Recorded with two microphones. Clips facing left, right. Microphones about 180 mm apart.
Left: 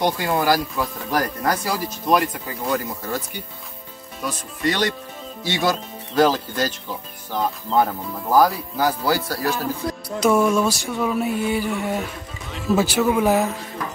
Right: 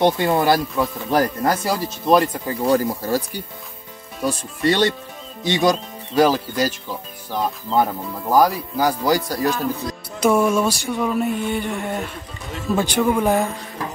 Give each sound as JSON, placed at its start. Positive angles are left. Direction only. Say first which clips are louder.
{"t": 0.0, "sound": "speech", "louder": "right 4 dB", "side_deg": -25}
{"t": 5.4, "sound": "speech", "louder": "right 4 dB", "side_deg": -20}
{"t": 9.6, "sound": "music", "louder": "right 1 dB", "side_deg": 0}